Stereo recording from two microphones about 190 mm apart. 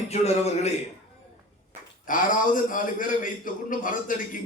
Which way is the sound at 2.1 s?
45° left (ahead or behind).